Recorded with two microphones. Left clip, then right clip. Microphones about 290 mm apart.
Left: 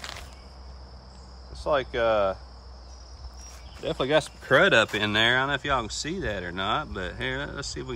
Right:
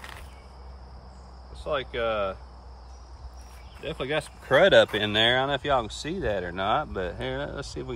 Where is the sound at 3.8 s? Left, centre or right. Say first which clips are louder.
Left 5 dB; centre.